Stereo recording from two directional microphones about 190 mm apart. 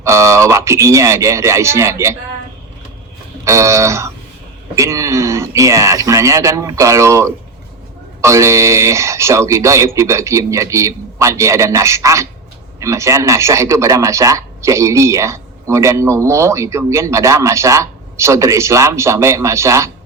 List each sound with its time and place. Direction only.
0.0 s speech: 15° right (ahead or behind)
3.4 s speech: 15° right (ahead or behind)